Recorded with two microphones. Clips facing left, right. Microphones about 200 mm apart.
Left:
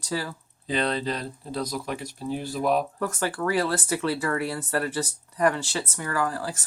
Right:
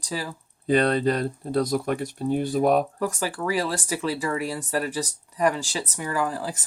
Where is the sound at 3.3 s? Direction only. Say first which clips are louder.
Left 3 dB; 10° right (ahead or behind).